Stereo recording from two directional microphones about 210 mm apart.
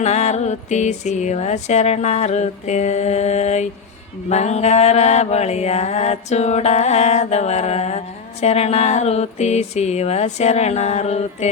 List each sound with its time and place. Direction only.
0.0 s mantra: 30° left (ahead or behind)